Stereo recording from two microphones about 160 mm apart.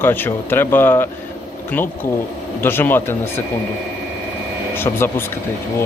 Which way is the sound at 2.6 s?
15° left (ahead or behind).